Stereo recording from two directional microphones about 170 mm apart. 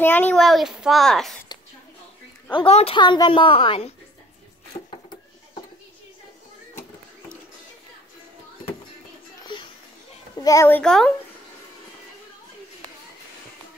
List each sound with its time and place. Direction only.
0.0 s a child's voice: 10° left (ahead or behind)
0.4 s a woman's voice: centre (ahead or behind)
2.5 s a woman's voice: 35° left (ahead or behind)
4.9 s a sound: 30° left (ahead or behind)
9.5 s a sound: 25° left (ahead or behind)
10.4 s a child's voice: 20° left (ahead or behind)
10.8 s a woman's voice: 5° left (ahead or behind)